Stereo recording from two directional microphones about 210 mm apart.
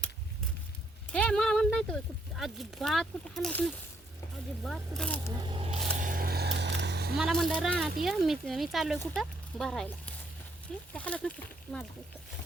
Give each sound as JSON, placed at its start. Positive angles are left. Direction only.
{"t": 1.1, "sound": "speech", "side_deg": 5}
{"t": 5.4, "sound": "a sound", "side_deg": -25}
{"t": 7.2, "sound": "speech", "side_deg": 0}